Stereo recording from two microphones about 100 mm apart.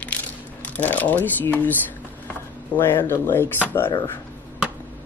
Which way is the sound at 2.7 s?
20° left (ahead or behind).